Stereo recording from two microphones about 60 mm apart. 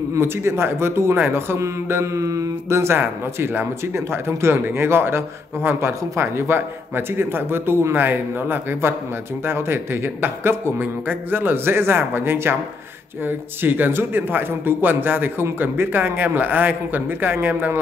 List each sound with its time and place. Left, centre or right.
0.2 s speech: right
1.6 s speech: right